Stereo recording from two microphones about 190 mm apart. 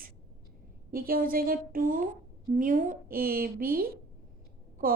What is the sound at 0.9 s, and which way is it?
A woman's voice, 50° right (ahead or behind).